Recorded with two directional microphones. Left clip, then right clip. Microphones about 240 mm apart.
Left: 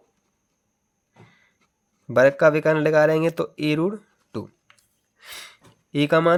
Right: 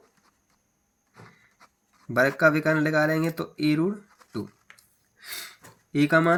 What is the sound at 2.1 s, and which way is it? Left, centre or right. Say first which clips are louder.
Speech: left 5 dB; left.